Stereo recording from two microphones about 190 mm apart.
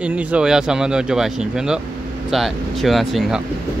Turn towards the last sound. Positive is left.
turn(degrees=0)  # may be behind; listen again after turning